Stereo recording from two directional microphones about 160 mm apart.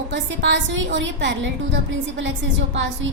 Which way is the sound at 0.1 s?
90° right.